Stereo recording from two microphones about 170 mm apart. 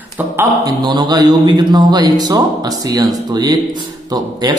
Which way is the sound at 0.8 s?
25° right (ahead or behind).